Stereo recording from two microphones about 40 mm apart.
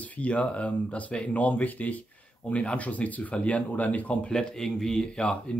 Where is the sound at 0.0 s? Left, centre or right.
Left.